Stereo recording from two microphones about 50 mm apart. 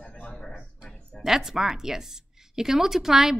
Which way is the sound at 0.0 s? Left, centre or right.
Centre.